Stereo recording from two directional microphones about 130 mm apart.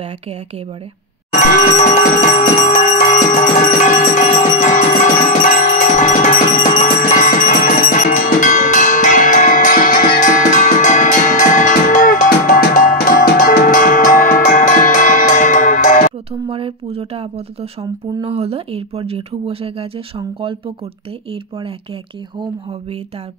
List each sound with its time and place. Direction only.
1.5 s music: 70° left (ahead or behind)
16.4 s speech: 45° right (ahead or behind)